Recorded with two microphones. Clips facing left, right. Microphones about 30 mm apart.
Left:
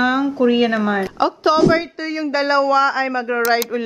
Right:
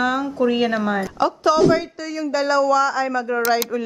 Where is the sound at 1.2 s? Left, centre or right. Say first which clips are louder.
Left 1 dB; left.